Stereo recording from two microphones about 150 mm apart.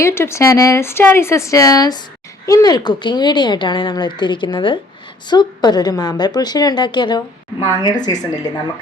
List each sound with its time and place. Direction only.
0.0 s speech: 15° left (ahead or behind)